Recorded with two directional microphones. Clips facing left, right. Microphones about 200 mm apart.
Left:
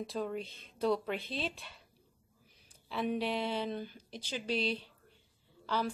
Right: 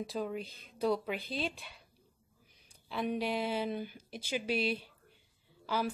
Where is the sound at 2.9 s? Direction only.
Centre (ahead or behind).